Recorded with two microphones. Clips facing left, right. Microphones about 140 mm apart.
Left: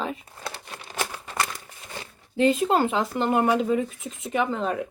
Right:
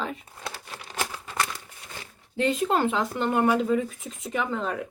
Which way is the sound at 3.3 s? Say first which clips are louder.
Even; 10° left (ahead or behind).